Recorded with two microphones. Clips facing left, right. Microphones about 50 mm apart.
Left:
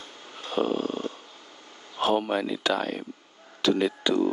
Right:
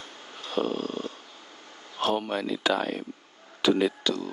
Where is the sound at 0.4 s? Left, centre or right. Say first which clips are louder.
Left 2 dB; centre.